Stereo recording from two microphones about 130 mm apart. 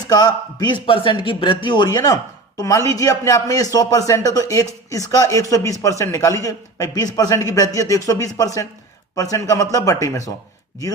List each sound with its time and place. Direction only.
0.0 s speech: 30° left (ahead or behind)